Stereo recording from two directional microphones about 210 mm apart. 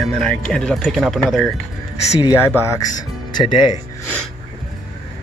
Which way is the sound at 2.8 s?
20° left (ahead or behind).